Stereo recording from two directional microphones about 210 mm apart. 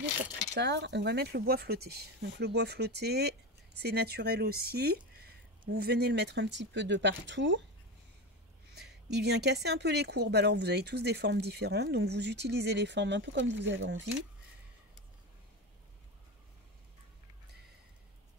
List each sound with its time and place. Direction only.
0.6 s speech: 55° right (ahead or behind)
8.7 s speech: 50° right (ahead or behind)